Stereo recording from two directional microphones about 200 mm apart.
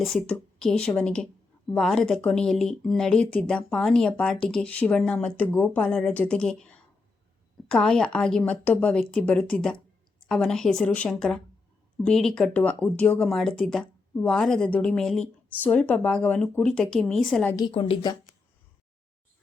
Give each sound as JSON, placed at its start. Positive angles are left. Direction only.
{"t": 0.0, "sound": "speech", "side_deg": 0}
{"t": 17.6, "sound": "a woman's voice", "side_deg": 25}